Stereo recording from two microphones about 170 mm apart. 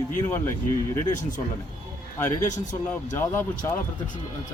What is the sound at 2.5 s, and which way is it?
Speech, 45° left (ahead or behind).